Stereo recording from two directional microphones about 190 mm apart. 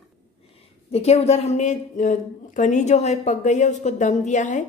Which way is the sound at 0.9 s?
35° left (ahead or behind).